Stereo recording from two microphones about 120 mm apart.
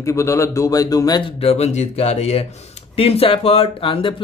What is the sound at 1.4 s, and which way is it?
Speech, 60° left (ahead or behind).